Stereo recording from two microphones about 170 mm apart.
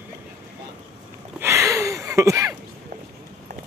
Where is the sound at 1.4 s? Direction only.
15° right (ahead or behind).